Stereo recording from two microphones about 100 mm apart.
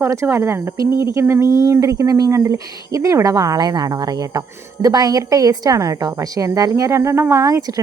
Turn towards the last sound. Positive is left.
turn(degrees=-35)  # may be behind; listen again after turning